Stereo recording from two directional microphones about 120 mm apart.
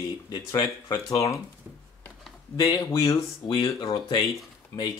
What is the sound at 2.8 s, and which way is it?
Speech, 30° left (ahead or behind).